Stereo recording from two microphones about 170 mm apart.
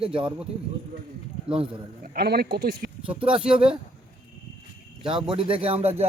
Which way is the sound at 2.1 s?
65° right (ahead or behind).